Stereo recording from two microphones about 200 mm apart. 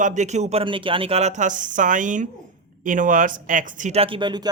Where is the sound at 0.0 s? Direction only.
35° right (ahead or behind).